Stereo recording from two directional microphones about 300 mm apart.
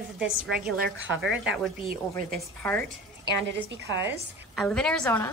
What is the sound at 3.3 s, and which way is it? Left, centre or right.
Speech, right.